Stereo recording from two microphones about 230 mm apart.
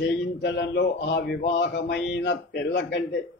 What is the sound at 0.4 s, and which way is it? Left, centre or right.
Speech, left.